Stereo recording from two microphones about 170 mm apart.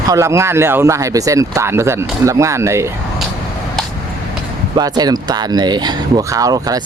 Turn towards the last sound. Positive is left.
turn(degrees=-20)  # may be behind; listen again after turning